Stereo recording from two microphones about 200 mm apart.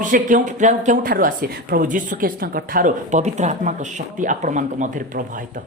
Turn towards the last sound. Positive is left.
turn(degrees=-40)  # may be behind; listen again after turning